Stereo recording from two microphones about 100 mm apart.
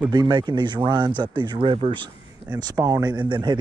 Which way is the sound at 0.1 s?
45° right (ahead or behind).